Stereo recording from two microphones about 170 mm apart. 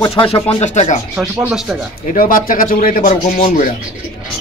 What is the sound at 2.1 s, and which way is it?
Speech, 55° left (ahead or behind).